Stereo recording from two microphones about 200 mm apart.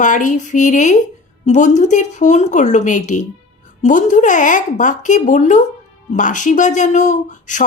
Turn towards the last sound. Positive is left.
turn(degrees=40)  # may be behind; listen again after turning